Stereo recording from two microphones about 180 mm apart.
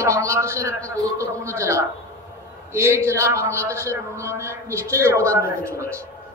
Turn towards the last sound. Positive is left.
turn(degrees=-15)  # may be behind; listen again after turning